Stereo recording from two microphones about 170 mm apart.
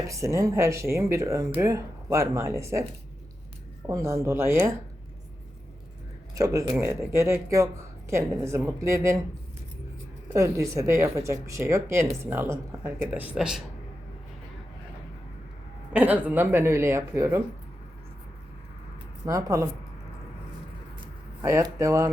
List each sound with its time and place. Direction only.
0.1 s speech: 15° right (ahead or behind)
3.8 s speech: 15° right (ahead or behind)
6.3 s a woman's voice: 20° right (ahead or behind)
10.3 s speech: 15° right (ahead or behind)
15.9 s speech: 10° right (ahead or behind)
19.2 s a woman's voice: 20° right (ahead or behind)
21.4 s speech: 15° right (ahead or behind)